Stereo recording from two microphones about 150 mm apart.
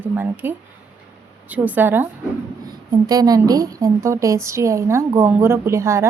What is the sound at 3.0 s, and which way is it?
A woman's voice, 25° right (ahead or behind).